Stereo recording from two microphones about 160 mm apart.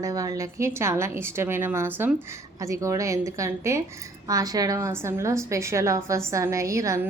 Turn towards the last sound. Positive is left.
turn(degrees=-20)  # may be behind; listen again after turning